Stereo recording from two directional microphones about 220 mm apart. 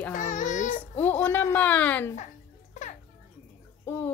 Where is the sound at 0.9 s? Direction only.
10° left (ahead or behind).